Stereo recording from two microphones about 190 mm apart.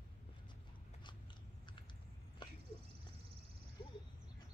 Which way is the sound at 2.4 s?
25° left (ahead or behind).